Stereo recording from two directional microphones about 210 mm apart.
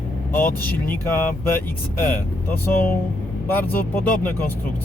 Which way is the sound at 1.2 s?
10° left (ahead or behind).